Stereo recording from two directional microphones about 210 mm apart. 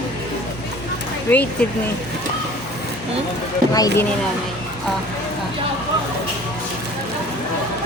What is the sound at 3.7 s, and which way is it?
Speech, 15° left (ahead or behind).